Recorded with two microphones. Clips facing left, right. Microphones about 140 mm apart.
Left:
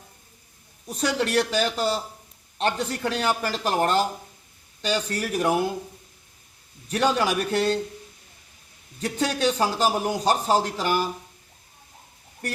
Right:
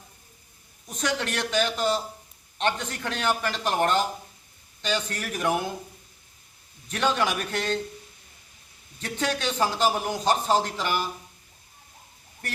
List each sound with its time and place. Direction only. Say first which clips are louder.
0.9 s speech: left 5 dB; 35° left (ahead or behind)
6.8 s speech: left 3 dB; 35° left (ahead or behind)
9.0 s speech: left 3 dB; 40° left (ahead or behind)
9.3 s speech: left 2 dB; 10° left (ahead or behind)
10.2 s speech: even; 40° left (ahead or behind)